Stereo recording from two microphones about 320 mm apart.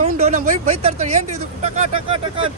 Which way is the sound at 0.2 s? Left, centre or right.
Right.